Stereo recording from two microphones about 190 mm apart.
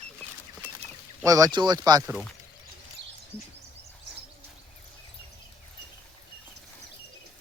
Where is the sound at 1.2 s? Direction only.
20° right (ahead or behind).